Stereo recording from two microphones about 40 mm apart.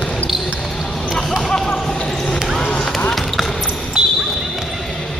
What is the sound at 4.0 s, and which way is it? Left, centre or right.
Basketball bounce, right.